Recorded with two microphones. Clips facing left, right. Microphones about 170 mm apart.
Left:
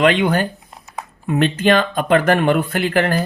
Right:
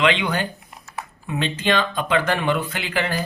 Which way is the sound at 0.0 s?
50° left (ahead or behind).